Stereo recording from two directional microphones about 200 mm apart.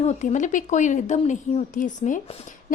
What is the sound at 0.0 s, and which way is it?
A woman's voice, 35° left (ahead or behind).